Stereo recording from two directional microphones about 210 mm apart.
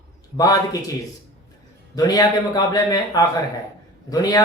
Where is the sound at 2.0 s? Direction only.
20° left (ahead or behind).